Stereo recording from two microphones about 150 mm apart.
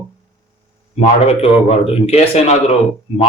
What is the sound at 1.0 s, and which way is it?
A man's voice, 45° left (ahead or behind).